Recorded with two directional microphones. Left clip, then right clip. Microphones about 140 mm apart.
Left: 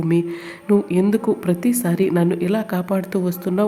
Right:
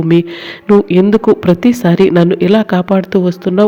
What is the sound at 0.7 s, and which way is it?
A woman's voice, 40° right (ahead or behind).